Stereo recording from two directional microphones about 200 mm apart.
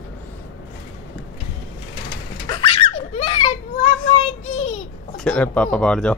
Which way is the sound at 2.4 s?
25° left (ahead or behind).